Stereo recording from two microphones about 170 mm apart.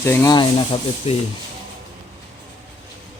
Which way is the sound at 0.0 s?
15° left (ahead or behind).